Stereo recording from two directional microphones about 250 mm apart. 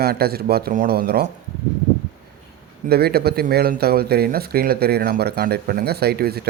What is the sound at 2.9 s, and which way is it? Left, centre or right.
Speech, right.